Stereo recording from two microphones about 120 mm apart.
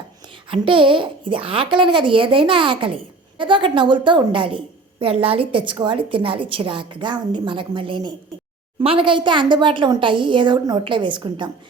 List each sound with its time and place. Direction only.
0.5 s speech: 45° right (ahead or behind)